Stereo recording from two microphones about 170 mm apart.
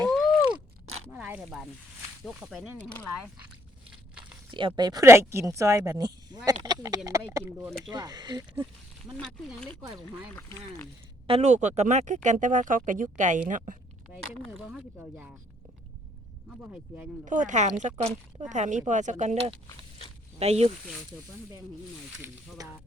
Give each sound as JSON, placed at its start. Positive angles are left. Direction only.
{"t": 0.0, "sound": "a sound", "side_deg": 0}
{"t": 1.1, "sound": "zipper", "side_deg": -5}
{"t": 2.2, "sound": "speech", "side_deg": 0}
{"t": 3.8, "sound": "walk", "side_deg": -5}
{"t": 4.5, "sound": "speech", "side_deg": -25}
{"t": 9.1, "sound": "speech", "side_deg": 5}
{"t": 11.3, "sound": "speech", "side_deg": -40}
{"t": 14.1, "sound": "speech", "side_deg": 0}
{"t": 17.2, "sound": "speech", "side_deg": -50}
{"t": 20.4, "sound": "speech", "side_deg": -40}
{"t": 22.2, "sound": "speech", "side_deg": -20}